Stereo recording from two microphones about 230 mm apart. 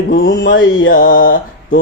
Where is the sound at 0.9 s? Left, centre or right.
Left.